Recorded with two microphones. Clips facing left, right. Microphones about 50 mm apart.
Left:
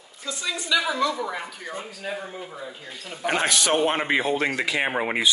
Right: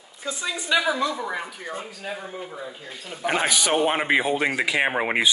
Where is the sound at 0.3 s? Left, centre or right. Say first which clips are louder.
Right 1 dB; centre.